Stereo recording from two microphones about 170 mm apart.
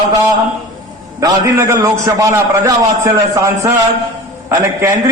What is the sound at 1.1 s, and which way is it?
A man's voice, 20° right (ahead or behind).